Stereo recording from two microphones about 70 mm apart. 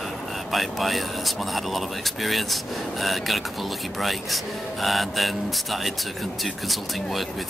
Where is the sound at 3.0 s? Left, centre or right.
Centre.